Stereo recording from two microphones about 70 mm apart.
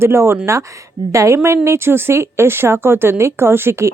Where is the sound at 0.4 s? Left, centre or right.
Right.